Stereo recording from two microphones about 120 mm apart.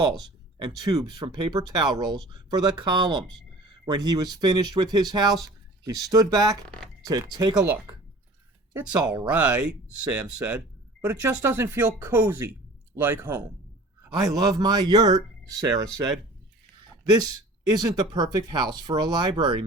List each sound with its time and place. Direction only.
0.6 s speech: 40° right (ahead or behind)
7.5 s speech: 10° right (ahead or behind)
8.9 s speech: 35° right (ahead or behind)
9.2 s speech: 10° right (ahead or behind)
14.3 s speech: 35° right (ahead or behind)
17.7 s speech: 35° right (ahead or behind)